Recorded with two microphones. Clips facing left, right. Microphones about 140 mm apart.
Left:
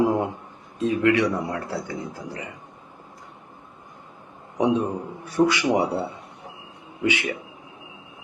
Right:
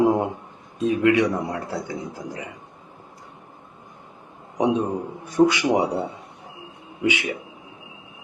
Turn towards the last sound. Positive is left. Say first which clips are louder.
# right 1 dB
turn(degrees=-15)  # may be behind; listen again after turning